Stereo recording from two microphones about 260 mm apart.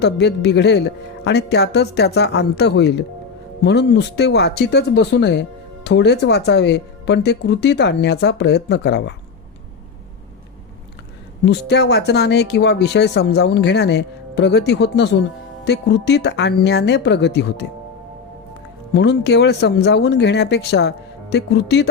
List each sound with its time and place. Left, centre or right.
0.0 s speech: left
11.4 s speech: left
18.9 s speech: left